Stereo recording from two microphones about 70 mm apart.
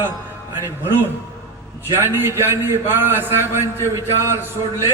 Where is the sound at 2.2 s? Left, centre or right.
Right.